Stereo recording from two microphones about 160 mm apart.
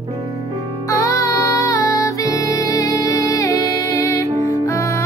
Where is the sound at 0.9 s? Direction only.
20° left (ahead or behind).